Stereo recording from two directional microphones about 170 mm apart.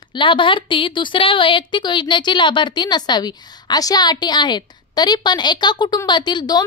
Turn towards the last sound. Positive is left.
turn(degrees=25)  # may be behind; listen again after turning